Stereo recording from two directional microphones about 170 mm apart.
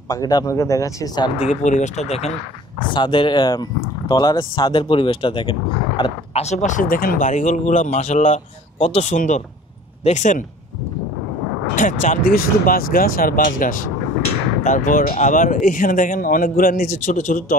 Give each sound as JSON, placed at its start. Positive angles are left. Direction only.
{"t": 0.1, "sound": "speech", "side_deg": 25}
{"t": 1.4, "sound": "speech", "side_deg": 45}
{"t": 2.9, "sound": "speech", "side_deg": 30}
{"t": 6.4, "sound": "speech", "side_deg": 45}
{"t": 11.7, "sound": "speech", "side_deg": 50}